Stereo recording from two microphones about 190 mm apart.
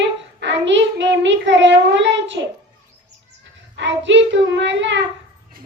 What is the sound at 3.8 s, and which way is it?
Child singing, 70° right (ahead or behind).